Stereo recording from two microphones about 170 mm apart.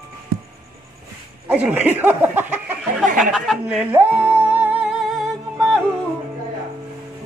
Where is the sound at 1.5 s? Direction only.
10° right (ahead or behind).